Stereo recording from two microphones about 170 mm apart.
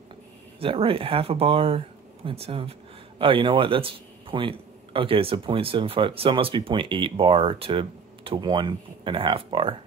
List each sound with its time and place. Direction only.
0.6 s a man's voice: 35° right (ahead or behind)